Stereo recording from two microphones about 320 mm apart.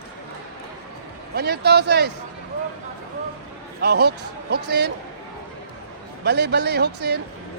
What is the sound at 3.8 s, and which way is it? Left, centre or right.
Speech, right.